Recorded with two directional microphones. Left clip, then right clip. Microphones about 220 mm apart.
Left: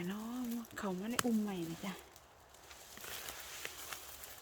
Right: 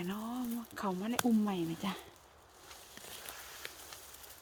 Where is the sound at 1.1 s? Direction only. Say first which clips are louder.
Right 4 dB; 20° right (ahead or behind).